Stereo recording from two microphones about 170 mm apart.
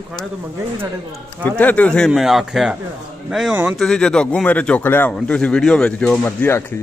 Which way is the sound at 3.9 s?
5° left (ahead or behind).